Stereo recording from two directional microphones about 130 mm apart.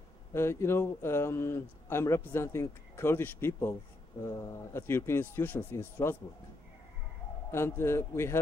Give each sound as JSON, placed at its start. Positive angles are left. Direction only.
{"t": 0.3, "sound": "a man's voice", "side_deg": 20}
{"t": 7.5, "sound": "a man's voice", "side_deg": 20}